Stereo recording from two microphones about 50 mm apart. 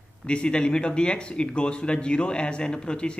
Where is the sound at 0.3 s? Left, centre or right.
Centre.